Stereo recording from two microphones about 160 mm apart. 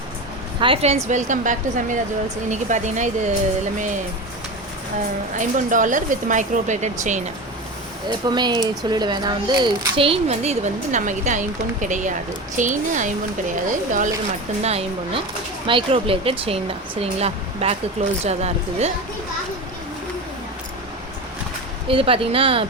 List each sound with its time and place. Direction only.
0.6 s speech: 35° right (ahead or behind)
5.4 s speech: 55° right (ahead or behind)
8.3 s speech: 25° right (ahead or behind); by 14.1 s 50° right (ahead or behind)
14.6 s speech: 40° right (ahead or behind)
21.8 s speech: 35° right (ahead or behind)